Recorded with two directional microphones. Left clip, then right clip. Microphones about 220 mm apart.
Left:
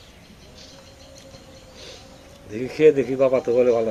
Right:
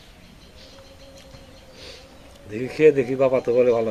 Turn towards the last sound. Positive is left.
turn(degrees=-20)  # may be behind; listen again after turning